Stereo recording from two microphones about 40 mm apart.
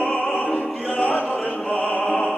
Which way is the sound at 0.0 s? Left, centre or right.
Left.